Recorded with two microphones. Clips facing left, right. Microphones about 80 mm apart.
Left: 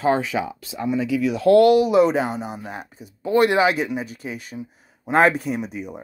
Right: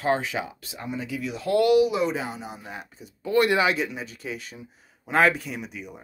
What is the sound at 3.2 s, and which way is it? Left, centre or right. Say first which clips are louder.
Speech: left 4 dB; left.